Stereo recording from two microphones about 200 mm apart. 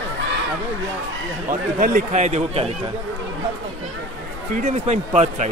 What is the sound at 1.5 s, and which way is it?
A man's voice, 40° right (ahead or behind).